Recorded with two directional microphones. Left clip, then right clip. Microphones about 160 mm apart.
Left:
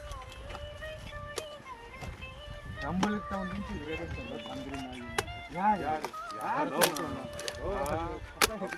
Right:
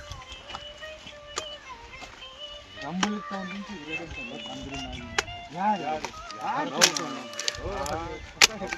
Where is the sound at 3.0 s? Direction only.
30° right (ahead or behind).